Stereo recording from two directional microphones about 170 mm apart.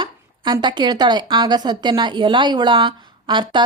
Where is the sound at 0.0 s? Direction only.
25° right (ahead or behind).